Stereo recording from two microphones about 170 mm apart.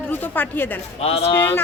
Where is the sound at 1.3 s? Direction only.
15° left (ahead or behind).